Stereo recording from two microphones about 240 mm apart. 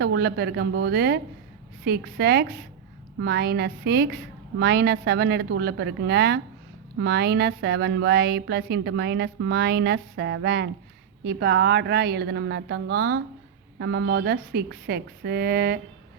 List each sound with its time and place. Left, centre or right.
0.0 s a woman's voice: right